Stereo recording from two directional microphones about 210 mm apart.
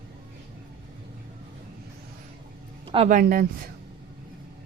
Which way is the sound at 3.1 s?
45° right (ahead or behind).